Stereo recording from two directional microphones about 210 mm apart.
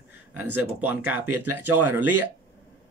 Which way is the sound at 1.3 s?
90° right.